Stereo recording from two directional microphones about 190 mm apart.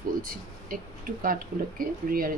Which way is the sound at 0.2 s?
50° right (ahead or behind).